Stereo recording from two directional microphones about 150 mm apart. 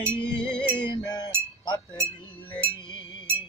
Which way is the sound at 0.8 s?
30° left (ahead or behind).